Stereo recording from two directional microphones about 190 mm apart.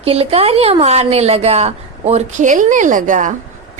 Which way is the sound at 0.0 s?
30° right (ahead or behind).